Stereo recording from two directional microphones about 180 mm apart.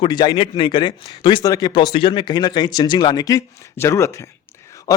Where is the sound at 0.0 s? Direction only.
25° left (ahead or behind).